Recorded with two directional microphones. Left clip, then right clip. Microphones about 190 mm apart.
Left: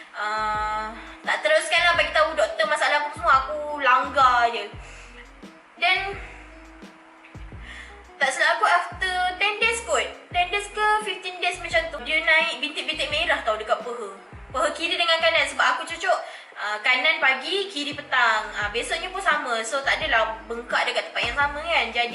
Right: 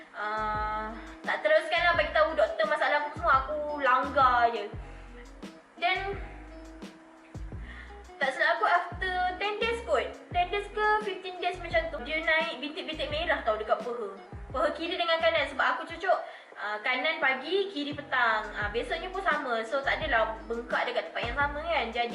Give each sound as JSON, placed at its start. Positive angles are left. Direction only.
{"t": 0.2, "sound": "music", "side_deg": -10}
{"t": 5.8, "sound": "music", "side_deg": -10}
{"t": 8.2, "sound": "music", "side_deg": -5}
{"t": 13.7, "sound": "speech", "side_deg": -20}
{"t": 14.5, "sound": "a woman's voice", "side_deg": -5}